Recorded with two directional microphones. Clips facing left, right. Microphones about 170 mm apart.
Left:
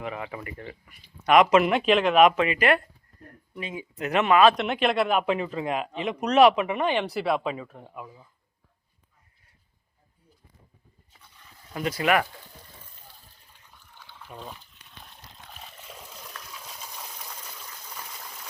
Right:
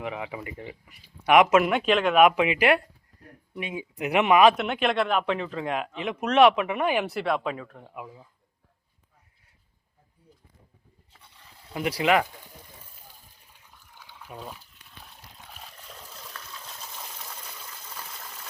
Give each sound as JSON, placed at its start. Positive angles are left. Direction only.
{"t": 0.0, "sound": "speech", "side_deg": -10}
{"t": 2.3, "sound": "speech", "side_deg": -15}
{"t": 4.5, "sound": "speech", "side_deg": 0}
{"t": 7.9, "sound": "speech", "side_deg": -10}
{"t": 11.2, "sound": "a sound", "side_deg": -30}
{"t": 11.7, "sound": "speech", "side_deg": -10}
{"t": 13.5, "sound": "liquid", "side_deg": -10}
{"t": 17.8, "sound": "water", "side_deg": 10}